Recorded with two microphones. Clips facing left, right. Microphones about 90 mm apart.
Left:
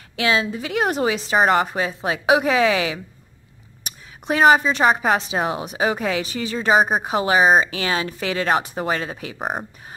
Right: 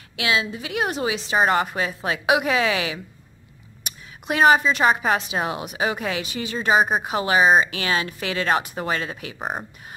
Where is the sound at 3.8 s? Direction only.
30° left (ahead or behind).